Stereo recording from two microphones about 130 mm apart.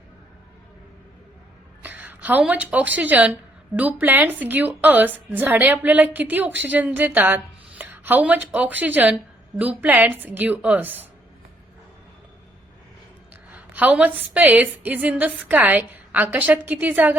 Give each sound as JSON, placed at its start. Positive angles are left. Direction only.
{"t": 1.8, "sound": "a woman's voice", "side_deg": -15}
{"t": 13.3, "sound": "a woman's voice", "side_deg": -10}